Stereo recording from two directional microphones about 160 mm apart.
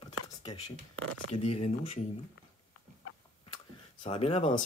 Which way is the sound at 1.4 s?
40° left (ahead or behind).